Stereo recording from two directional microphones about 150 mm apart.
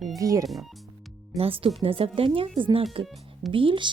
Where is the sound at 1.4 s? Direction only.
40° right (ahead or behind).